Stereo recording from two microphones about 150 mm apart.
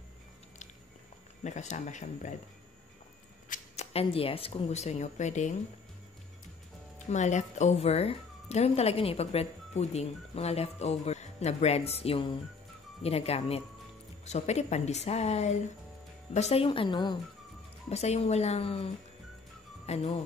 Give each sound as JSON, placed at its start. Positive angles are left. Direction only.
{"t": 1.4, "sound": "speech", "side_deg": 50}
{"t": 3.4, "sound": "speech", "side_deg": 55}
{"t": 7.1, "sound": "a woman's voice", "side_deg": 50}
{"t": 17.8, "sound": "speech", "side_deg": 45}
{"t": 19.9, "sound": "speech", "side_deg": 45}